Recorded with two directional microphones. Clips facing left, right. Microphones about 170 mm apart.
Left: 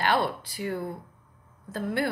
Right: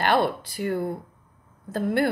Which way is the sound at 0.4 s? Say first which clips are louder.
Right 5 dB; 55° right (ahead or behind).